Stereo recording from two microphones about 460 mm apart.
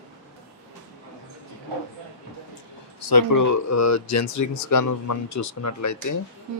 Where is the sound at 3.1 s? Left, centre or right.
Left.